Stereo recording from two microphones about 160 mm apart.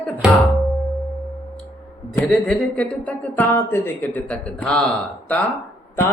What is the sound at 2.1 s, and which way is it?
Speech, 5° left (ahead or behind).